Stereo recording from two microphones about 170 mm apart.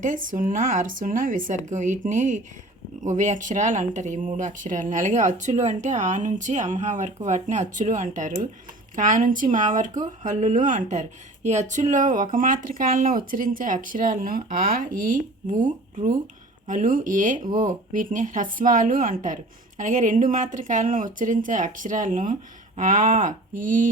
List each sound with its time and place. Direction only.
0.0 s speech: 50° right (ahead or behind)